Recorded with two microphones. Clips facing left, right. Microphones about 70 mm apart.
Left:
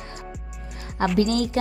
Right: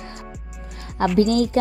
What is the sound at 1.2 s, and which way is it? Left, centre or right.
Speech, right.